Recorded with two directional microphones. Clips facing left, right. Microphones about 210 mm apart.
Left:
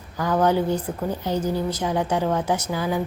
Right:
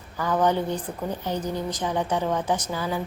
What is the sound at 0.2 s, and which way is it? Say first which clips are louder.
A woman's voice: left 3 dB; 10° left (ahead or behind).